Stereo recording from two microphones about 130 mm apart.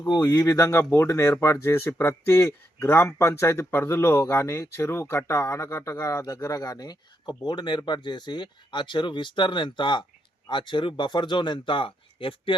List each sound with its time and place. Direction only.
0.1 s speech: 30° left (ahead or behind)